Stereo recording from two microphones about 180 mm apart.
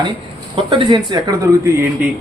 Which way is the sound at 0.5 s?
25° right (ahead or behind).